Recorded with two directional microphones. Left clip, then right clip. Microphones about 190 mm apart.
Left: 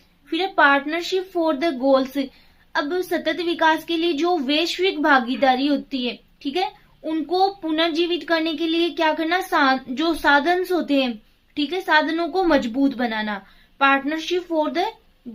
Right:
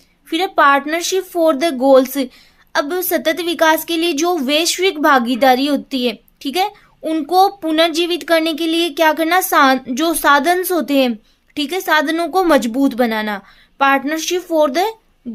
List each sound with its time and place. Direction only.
0.3 s a woman's voice: 55° right (ahead or behind)